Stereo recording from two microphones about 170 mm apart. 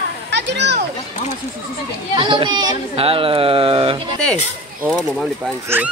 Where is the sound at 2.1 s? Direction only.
30° right (ahead or behind).